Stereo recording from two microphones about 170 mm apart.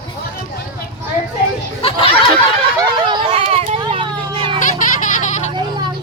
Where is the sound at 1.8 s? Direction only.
35° left (ahead or behind).